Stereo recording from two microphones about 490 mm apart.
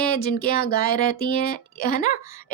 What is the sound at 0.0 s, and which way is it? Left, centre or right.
Speech, centre.